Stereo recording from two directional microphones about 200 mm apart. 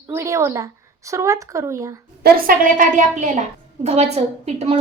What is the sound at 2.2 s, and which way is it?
A woman's voice, 45° right (ahead or behind).